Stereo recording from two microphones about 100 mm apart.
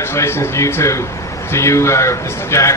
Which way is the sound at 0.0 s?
25° left (ahead or behind).